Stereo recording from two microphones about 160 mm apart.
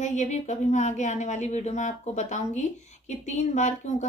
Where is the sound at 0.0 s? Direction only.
50° left (ahead or behind).